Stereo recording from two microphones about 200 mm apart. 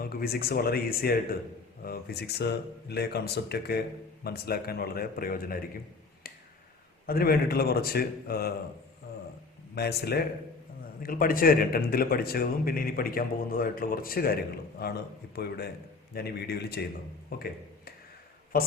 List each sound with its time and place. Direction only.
0.0 s speech: 50° left (ahead or behind)
6.3 s a sound: 50° left (ahead or behind)
7.1 s speech: 50° left (ahead or behind)
9.7 s speech: 55° left (ahead or behind)